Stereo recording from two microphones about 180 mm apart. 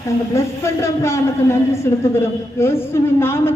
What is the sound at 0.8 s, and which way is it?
A woman's voice, 15° left (ahead or behind).